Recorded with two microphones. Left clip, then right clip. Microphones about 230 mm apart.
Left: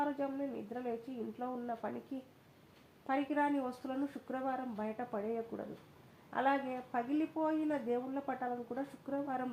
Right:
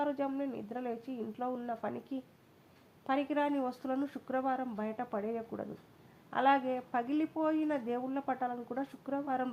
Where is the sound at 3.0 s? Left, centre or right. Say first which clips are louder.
Right 2 dB; right.